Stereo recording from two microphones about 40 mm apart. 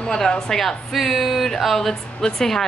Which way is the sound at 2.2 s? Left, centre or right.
Centre.